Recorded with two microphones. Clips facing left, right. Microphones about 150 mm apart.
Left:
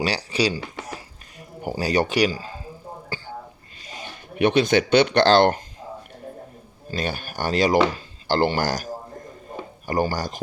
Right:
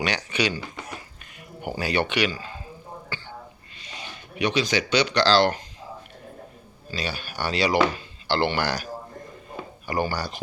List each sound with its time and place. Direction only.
0.0 s speech: 35° left (ahead or behind)
3.8 s speech: 45° left (ahead or behind)
6.9 s speech: 50° left (ahead or behind)